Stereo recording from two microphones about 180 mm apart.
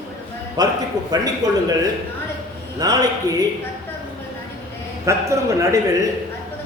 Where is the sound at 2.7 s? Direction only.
20° right (ahead or behind).